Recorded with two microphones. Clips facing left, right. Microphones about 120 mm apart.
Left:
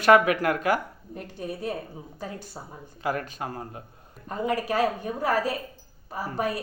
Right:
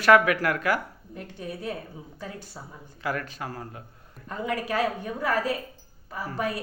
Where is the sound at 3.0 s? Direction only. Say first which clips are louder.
Left 2 dB; 20° left (ahead or behind).